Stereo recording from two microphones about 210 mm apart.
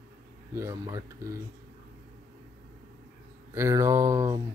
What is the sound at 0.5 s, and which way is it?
Speech, 15° right (ahead or behind).